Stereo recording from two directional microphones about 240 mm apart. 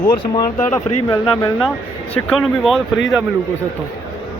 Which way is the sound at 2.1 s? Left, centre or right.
Centre.